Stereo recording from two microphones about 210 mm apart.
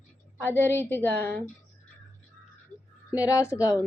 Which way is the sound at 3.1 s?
15° left (ahead or behind).